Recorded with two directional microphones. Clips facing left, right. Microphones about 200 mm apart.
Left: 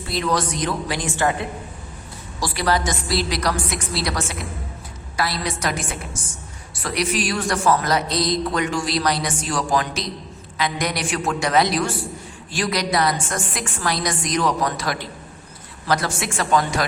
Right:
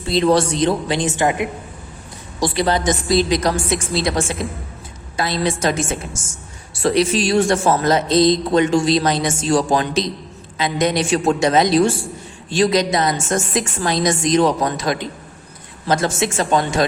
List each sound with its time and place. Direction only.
0.0 s a man's voice: 25° right (ahead or behind)